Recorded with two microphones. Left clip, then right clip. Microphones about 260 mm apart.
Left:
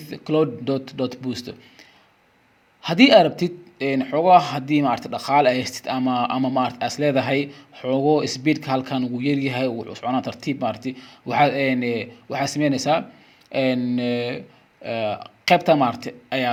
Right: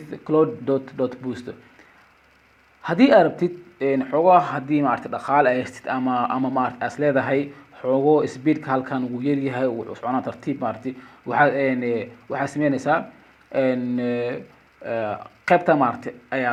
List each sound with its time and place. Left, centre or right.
0.1 s speech: left
2.8 s speech: left